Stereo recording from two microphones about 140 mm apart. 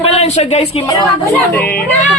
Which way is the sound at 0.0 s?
50° left (ahead or behind).